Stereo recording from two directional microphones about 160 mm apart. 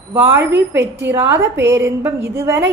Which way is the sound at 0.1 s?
15° right (ahead or behind).